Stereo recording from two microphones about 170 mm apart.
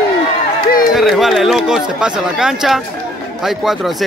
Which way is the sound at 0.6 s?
60° left (ahead or behind).